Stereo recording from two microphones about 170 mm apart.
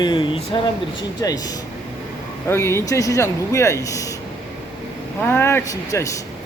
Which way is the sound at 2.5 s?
15° left (ahead or behind).